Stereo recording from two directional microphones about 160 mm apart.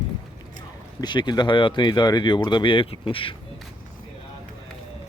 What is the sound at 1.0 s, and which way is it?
Speech, 25° left (ahead or behind).